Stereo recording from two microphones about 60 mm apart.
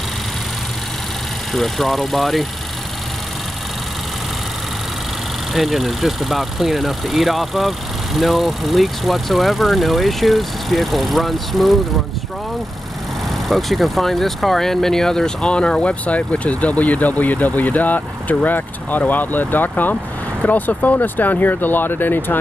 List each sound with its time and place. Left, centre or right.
1.5 s speech: centre
5.5 s speech: centre
13.5 s speech: centre; by 22.4 s left